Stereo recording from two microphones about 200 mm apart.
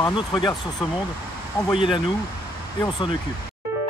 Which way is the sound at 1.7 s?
25° left (ahead or behind).